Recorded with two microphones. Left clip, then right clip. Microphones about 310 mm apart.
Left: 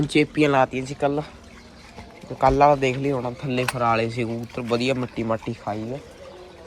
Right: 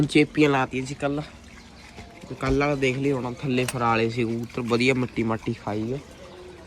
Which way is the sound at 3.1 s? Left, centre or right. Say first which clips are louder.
Left 1 dB; centre.